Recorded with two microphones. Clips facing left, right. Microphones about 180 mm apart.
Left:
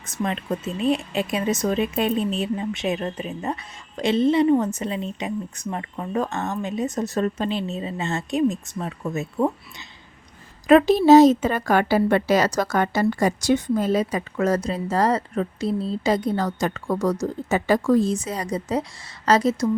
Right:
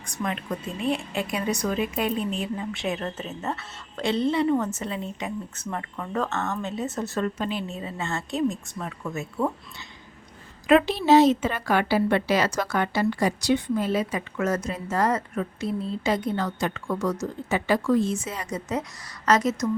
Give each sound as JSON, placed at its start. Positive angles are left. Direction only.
{"t": 0.2, "sound": "speech", "side_deg": 30}
{"t": 10.7, "sound": "a woman's voice", "side_deg": 40}